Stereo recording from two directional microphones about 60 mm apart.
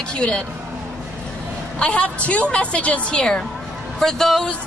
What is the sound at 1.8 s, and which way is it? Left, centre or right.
A woman's voice, centre.